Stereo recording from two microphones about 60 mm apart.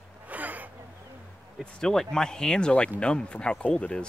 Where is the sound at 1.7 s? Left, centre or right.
Centre.